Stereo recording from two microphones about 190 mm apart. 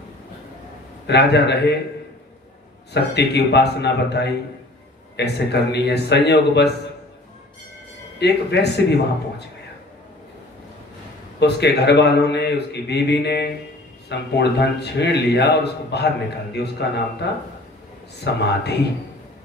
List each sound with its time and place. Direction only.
1.0 s a man's voice: 60° left (ahead or behind)
2.9 s a man's voice: 60° left (ahead or behind)
8.2 s a man's voice: 60° left (ahead or behind)
11.3 s a man's voice: 60° left (ahead or behind)